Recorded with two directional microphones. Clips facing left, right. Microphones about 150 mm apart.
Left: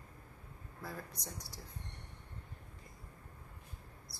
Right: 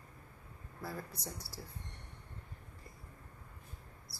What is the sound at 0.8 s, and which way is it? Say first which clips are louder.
Speech: right 2 dB; 5° right (ahead or behind).